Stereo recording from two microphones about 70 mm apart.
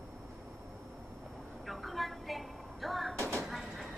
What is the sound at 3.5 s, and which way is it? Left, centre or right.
Train, centre.